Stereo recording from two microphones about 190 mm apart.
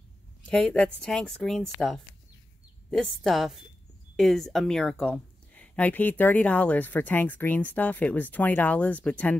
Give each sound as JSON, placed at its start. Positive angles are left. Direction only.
{"t": 0.5, "sound": "speech", "side_deg": 5}